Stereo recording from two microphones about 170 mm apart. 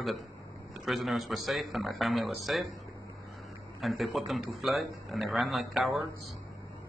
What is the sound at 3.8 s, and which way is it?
A man's voice, centre (ahead or behind).